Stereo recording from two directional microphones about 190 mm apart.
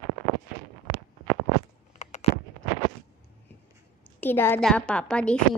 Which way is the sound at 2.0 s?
35° left (ahead or behind).